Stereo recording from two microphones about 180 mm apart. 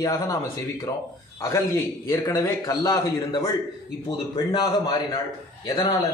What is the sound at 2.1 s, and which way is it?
A man's voice, 15° left (ahead or behind).